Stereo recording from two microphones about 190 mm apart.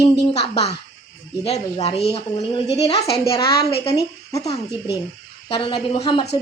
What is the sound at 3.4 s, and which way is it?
Speech, 55° left (ahead or behind).